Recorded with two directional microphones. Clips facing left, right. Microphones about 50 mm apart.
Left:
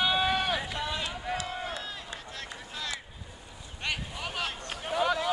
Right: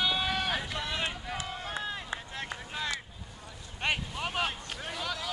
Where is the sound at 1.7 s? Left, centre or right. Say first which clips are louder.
Right 3 dB; right.